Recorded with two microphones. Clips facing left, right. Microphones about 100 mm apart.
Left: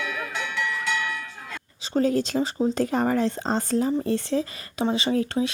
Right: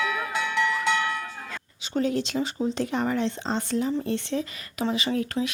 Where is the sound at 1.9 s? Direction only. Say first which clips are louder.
Left 3 dB; 40° left (ahead or behind).